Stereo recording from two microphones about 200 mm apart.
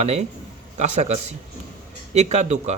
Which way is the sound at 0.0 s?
35° right (ahead or behind).